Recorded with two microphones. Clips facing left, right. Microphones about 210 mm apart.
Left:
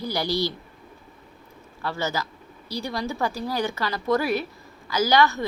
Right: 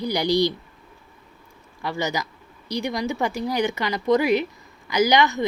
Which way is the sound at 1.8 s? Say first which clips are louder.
Right 2 dB; 15° right (ahead or behind).